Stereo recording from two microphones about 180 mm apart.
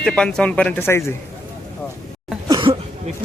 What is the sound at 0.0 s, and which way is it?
Speech, 5° left (ahead or behind).